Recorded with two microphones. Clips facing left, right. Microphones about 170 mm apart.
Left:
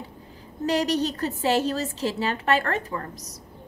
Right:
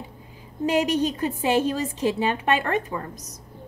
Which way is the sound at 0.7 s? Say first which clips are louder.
Right 2 dB; 40° left (ahead or behind).